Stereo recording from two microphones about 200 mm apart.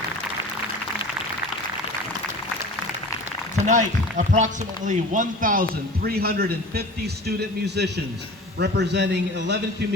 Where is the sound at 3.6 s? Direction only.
35° right (ahead or behind).